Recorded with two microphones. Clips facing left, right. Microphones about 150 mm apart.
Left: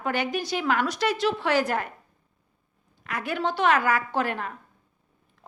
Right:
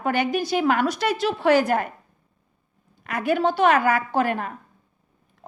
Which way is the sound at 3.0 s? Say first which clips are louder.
Right 6 dB; 55° right (ahead or behind).